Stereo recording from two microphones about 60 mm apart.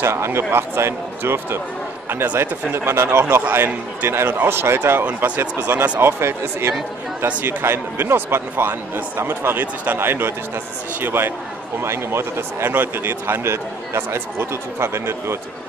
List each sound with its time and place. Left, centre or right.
0.0 s speech: right
2.2 s speech: right
2.7 s speech: right
4.1 s speech: right
5.0 s speech: right
5.4 s speech: right
7.2 s speech: right
7.6 s speech: right
12.7 s speech: right